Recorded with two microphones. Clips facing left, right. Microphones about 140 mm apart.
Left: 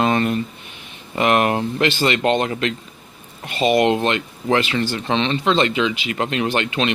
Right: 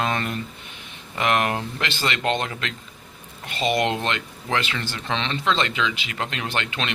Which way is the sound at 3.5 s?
20° left (ahead or behind).